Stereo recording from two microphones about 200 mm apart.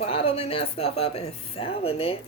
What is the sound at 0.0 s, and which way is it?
A woman's voice, 30° left (ahead or behind).